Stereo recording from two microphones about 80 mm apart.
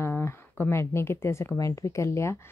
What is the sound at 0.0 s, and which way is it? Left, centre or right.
Speech, left.